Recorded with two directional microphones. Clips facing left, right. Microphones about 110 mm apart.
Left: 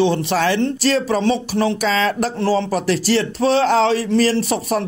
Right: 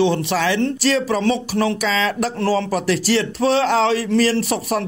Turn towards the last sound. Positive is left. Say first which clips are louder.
# left 1 dB
turn(degrees=35)  # may be behind; listen again after turning